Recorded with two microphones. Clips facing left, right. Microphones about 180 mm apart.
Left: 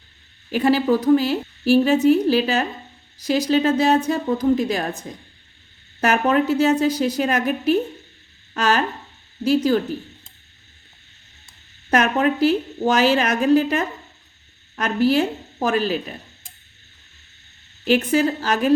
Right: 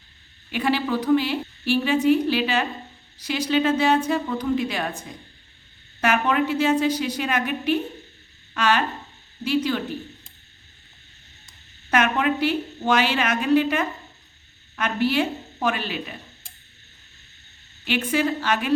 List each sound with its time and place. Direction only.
0.5 s a woman's voice: 40° left (ahead or behind)
6.0 s a woman's voice: 40° left (ahead or behind)
11.9 s a woman's voice: 40° left (ahead or behind)
17.8 s a woman's voice: 40° left (ahead or behind)